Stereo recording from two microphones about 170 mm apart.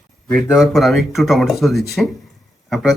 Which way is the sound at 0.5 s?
Centre (ahead or behind).